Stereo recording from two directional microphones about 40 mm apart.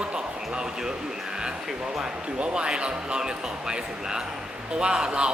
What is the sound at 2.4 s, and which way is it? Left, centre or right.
A man's voice, right.